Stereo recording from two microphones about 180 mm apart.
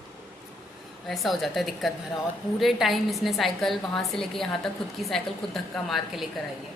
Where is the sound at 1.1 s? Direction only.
Centre (ahead or behind).